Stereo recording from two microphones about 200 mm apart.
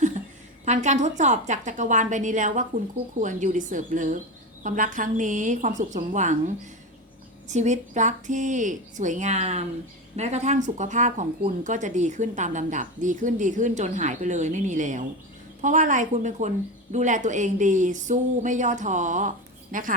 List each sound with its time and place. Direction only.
0.6 s speech: 35° right (ahead or behind)
7.5 s speech: 35° right (ahead or behind)